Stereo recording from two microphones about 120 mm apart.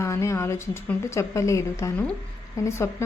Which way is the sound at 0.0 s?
25° left (ahead or behind).